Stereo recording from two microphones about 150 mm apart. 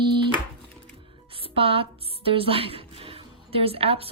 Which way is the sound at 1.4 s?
40° right (ahead or behind).